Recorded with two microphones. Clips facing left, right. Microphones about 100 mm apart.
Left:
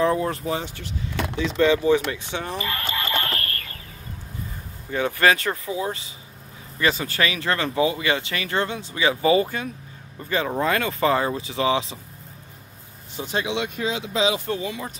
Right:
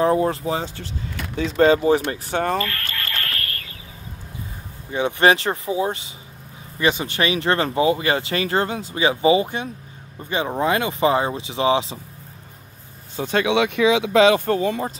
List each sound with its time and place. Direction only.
0.0 s speech: 30° right (ahead or behind)
1.4 s speech: 40° right (ahead or behind)
2.3 s speech: 55° right (ahead or behind)
2.6 s a sound: 15° left (ahead or behind)
4.9 s speech: 25° right (ahead or behind)
13.2 s speech: 65° right (ahead or behind)